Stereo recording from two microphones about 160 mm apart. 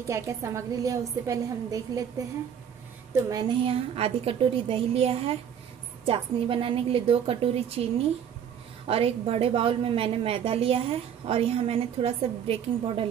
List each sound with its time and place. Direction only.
0.1 s a woman's voice: 20° right (ahead or behind)
3.3 s a woman's voice: 25° right (ahead or behind)
3.6 s a woman's voice: 35° right (ahead or behind)